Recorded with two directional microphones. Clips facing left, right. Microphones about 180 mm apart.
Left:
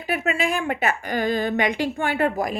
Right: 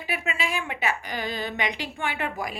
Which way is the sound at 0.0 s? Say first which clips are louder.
Left 7 dB; 45° left (ahead or behind).